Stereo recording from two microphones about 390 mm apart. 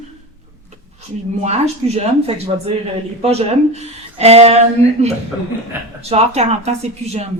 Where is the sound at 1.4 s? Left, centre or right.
Centre.